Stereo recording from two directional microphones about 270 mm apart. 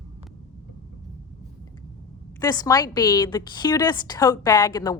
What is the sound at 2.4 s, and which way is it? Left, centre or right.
A woman's voice, centre.